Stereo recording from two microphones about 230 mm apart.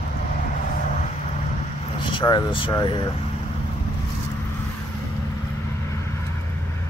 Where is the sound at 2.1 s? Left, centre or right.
Centre.